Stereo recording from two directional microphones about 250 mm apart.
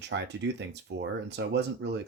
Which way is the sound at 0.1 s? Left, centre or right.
Right.